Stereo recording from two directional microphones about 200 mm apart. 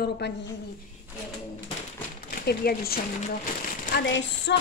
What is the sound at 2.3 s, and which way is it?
Speech, 50° left (ahead or behind).